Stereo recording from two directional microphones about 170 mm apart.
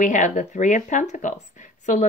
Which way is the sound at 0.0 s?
45° left (ahead or behind).